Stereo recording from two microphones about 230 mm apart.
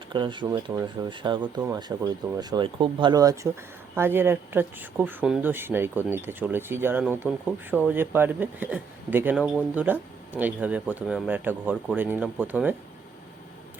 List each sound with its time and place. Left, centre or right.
0.1 s speech: centre